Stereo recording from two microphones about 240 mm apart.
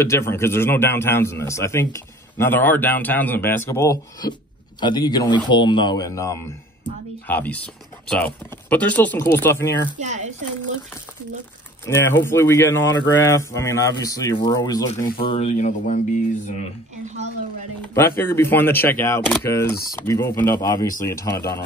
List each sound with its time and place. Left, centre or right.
0.0 s a man's voice: centre
8.6 s a man's voice: centre
9.9 s speech: right
11.8 s a man's voice: centre; by 16.0 s left
17.0 s speech: right
17.9 s a man's voice: centre